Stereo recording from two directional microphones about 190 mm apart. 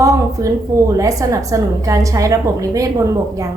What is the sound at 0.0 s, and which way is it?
A woman's voice, 15° right (ahead or behind).